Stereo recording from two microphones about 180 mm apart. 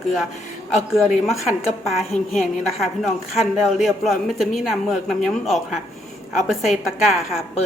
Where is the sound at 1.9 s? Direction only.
Centre (ahead or behind).